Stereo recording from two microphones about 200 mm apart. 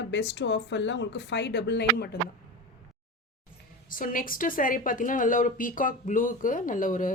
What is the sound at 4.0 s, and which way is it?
A woman's voice, 45° left (ahead or behind).